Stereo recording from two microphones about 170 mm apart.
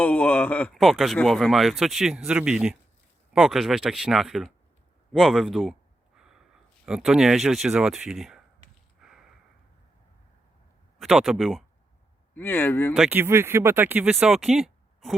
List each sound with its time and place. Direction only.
0.0 s speech: 10° left (ahead or behind)
6.1 s snort: 5° right (ahead or behind)
6.8 s speech: 5° right (ahead or behind)
9.0 s sniff: 5° right (ahead or behind)
10.9 s speech: centre (ahead or behind)
12.3 s speech: 10° left (ahead or behind)
12.9 s speech: 5° right (ahead or behind)